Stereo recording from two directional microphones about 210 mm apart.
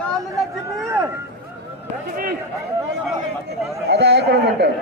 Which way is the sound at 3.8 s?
55° right (ahead or behind).